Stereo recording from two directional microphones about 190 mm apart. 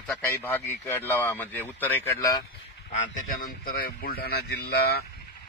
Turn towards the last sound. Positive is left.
turn(degrees=55)  # may be behind; listen again after turning